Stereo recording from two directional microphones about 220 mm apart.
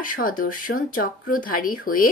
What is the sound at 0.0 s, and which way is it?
Speech, 40° left (ahead or behind).